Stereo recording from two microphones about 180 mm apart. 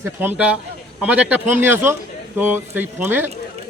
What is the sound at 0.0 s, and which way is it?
Speech, 10° right (ahead or behind).